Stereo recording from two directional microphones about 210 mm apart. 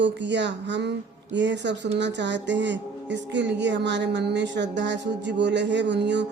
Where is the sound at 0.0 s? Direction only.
55° right (ahead or behind).